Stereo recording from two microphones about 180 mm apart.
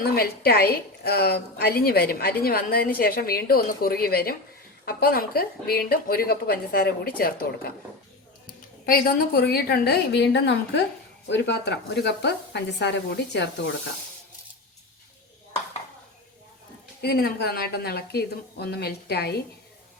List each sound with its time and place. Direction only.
0.0 s a woman's voice: 60° left (ahead or behind)
8.9 s a woman's voice: 55° left (ahead or behind); by 13.7 s 75° left (ahead or behind)
17.0 s a woman's voice: 60° left (ahead or behind)